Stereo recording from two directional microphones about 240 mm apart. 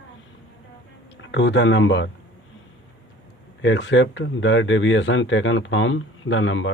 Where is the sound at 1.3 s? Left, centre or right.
Left.